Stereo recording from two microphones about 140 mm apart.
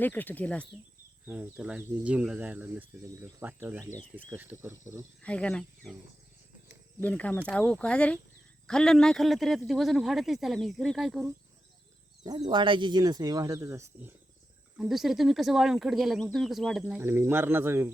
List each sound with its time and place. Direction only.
0.0 s speech: 10° left (ahead or behind)
1.3 s speech: 10° right (ahead or behind)
5.2 s speech: 10° left (ahead or behind)
7.0 s speech: 10° left (ahead or behind)
12.2 s speech: 30° right (ahead or behind)
14.8 s speech: centre (ahead or behind)
16.8 s speech: 15° right (ahead or behind)